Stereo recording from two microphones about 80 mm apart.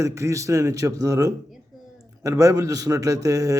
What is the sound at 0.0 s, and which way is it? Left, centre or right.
A man's voice, right.